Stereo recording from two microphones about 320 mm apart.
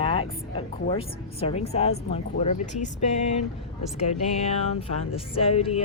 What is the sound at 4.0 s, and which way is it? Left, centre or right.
A woman's voice, centre.